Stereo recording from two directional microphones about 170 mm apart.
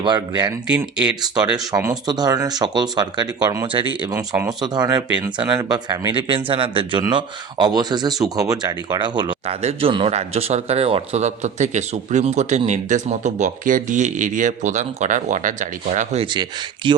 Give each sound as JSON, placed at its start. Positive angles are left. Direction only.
{"t": 0.0, "sound": "speech", "side_deg": -25}
{"t": 0.7, "sound": "speech", "side_deg": -5}
{"t": 1.2, "sound": "a man's voice", "side_deg": -25}
{"t": 16.2, "sound": "speech", "side_deg": -25}